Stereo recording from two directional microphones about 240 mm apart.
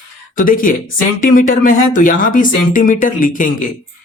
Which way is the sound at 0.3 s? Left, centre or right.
Left.